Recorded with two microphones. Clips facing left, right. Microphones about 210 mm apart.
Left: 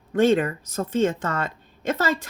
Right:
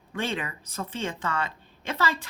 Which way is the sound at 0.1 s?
45° left (ahead or behind).